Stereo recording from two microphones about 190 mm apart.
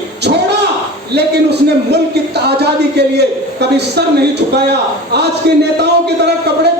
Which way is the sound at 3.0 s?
60° right (ahead or behind).